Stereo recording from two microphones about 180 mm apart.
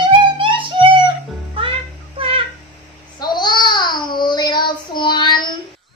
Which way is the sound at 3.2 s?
25° left (ahead or behind).